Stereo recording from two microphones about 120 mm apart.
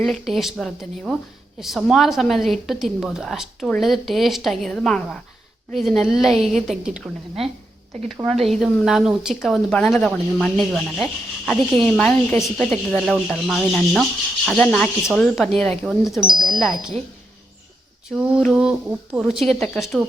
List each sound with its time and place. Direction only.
0.0 s a woman's voice: centre (ahead or behind)
8.3 s a woman's voice: centre (ahead or behind)
14.6 s speech: 10° left (ahead or behind)
15.0 s a woman's voice: centre (ahead or behind)
16.2 s speech: 40° right (ahead or behind)
16.5 s a woman's voice: centre (ahead or behind)
18.1 s a woman's voice: 5° right (ahead or behind)